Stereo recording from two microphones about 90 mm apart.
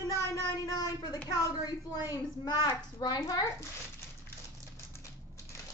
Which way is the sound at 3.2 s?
40° left (ahead or behind).